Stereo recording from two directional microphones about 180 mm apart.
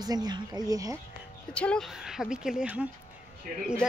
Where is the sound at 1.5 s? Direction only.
5° left (ahead or behind).